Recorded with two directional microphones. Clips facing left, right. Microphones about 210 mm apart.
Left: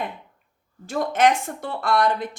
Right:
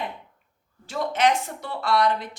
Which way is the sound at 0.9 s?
50° left (ahead or behind).